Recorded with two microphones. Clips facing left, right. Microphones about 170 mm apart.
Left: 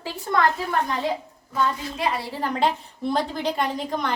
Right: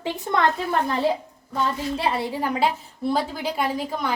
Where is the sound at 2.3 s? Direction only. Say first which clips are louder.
Right 1 dB; 10° right (ahead or behind).